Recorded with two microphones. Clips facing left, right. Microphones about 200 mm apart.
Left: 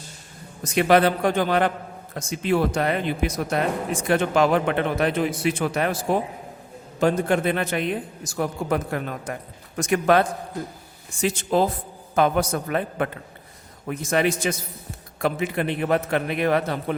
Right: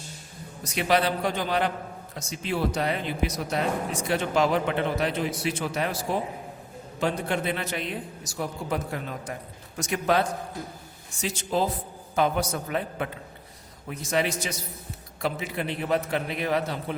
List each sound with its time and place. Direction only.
0.6 s a man's voice: 50° left (ahead or behind)